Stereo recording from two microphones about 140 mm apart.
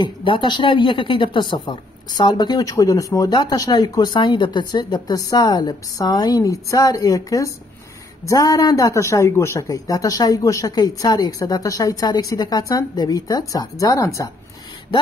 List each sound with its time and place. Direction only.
0.0 s speech: 35° left (ahead or behind)